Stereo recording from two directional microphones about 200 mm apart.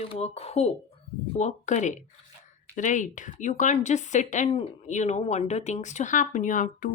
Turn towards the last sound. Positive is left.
turn(degrees=40)  # may be behind; listen again after turning